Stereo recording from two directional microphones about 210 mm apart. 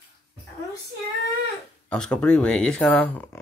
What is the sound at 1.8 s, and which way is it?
Speech, 5° left (ahead or behind).